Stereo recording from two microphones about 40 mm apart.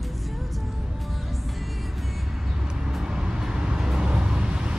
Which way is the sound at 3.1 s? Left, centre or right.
Centre.